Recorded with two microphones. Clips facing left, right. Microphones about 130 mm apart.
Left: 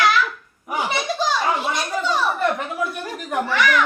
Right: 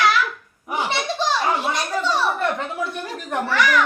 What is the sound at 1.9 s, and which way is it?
A child's voice, centre (ahead or behind).